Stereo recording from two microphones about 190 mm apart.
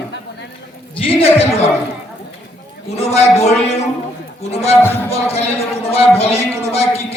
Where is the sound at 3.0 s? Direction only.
35° left (ahead or behind).